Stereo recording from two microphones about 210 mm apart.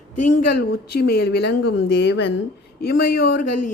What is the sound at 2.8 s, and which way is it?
Speech, 45° left (ahead or behind).